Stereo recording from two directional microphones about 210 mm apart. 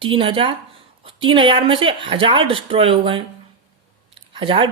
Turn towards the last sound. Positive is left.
turn(degrees=-25)  # may be behind; listen again after turning